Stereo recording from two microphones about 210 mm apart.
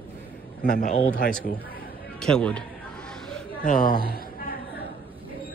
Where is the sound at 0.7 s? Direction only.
35° left (ahead or behind).